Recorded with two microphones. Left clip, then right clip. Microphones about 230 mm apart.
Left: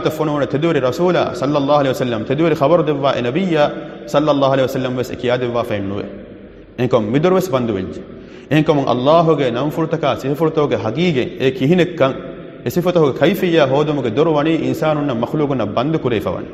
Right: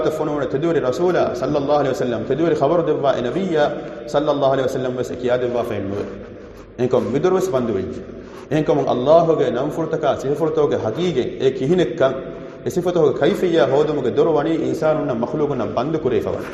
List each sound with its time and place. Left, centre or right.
0.0 s a man's voice: left